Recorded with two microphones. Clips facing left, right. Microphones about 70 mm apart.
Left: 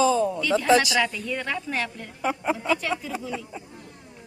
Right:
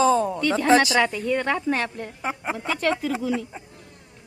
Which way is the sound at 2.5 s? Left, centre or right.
Right.